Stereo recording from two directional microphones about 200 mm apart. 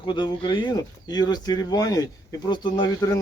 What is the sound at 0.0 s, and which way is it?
Speech, 25° left (ahead or behind).